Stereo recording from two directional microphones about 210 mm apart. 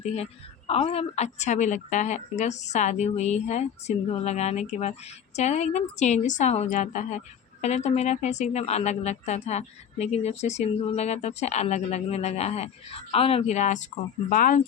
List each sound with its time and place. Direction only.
0.0 s a woman's voice: 30° left (ahead or behind)